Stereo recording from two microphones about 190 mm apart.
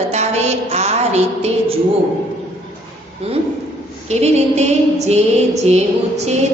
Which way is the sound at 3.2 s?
30° right (ahead or behind).